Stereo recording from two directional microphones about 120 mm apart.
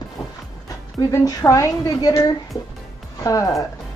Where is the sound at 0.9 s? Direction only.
30° left (ahead or behind).